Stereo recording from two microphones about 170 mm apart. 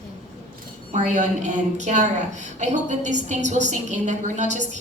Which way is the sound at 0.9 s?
45° right (ahead or behind).